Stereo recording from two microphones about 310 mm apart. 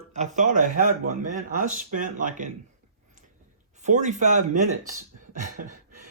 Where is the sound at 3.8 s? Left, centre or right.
Right.